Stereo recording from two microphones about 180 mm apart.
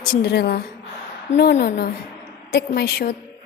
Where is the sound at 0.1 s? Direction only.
65° left (ahead or behind).